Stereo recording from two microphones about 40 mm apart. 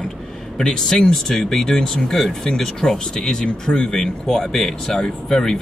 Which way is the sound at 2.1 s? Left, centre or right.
Centre.